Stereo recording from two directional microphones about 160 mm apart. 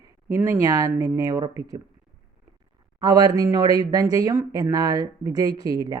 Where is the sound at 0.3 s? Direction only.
15° right (ahead or behind).